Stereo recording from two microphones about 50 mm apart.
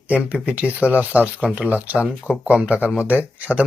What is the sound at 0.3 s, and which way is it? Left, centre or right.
Speech, right.